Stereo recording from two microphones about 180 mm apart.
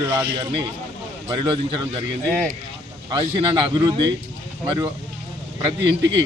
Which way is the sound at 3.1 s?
25° right (ahead or behind).